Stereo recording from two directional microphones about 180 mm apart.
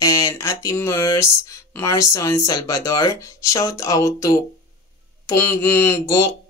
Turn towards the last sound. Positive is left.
turn(degrees=20)  # may be behind; listen again after turning